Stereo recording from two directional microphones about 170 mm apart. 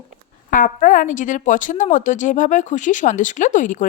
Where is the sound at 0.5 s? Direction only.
50° left (ahead or behind).